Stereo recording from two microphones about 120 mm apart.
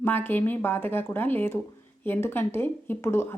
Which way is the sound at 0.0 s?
15° left (ahead or behind).